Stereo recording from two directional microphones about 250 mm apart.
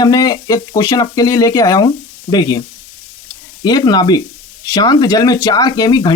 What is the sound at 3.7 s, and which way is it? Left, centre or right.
Speech, centre.